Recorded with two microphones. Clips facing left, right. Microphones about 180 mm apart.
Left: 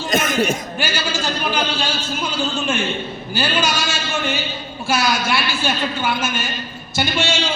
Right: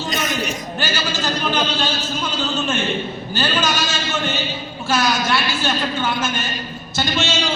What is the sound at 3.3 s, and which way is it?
Speech, 10° left (ahead or behind).